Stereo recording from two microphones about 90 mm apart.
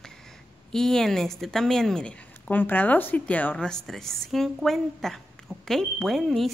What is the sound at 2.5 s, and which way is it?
Speech, 20° left (ahead or behind).